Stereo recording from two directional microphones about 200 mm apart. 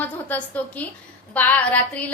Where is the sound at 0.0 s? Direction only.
10° left (ahead or behind).